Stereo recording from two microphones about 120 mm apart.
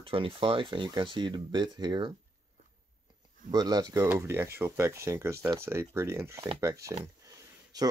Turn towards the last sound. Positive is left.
turn(degrees=-35)  # may be behind; listen again after turning